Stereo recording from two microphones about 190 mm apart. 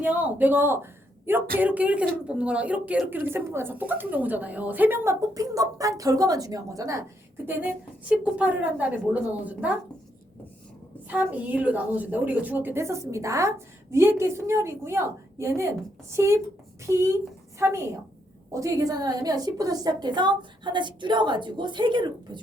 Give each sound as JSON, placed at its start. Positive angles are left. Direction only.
{"t": 0.0, "sound": "speech", "side_deg": -10}
{"t": 11.1, "sound": "a woman's voice", "side_deg": -10}